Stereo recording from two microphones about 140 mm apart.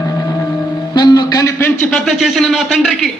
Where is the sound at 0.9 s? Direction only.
30° left (ahead or behind).